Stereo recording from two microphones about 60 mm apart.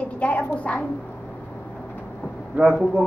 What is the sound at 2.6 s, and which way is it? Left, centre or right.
Speech, right.